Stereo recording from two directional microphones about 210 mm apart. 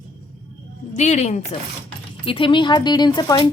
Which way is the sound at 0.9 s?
35° left (ahead or behind).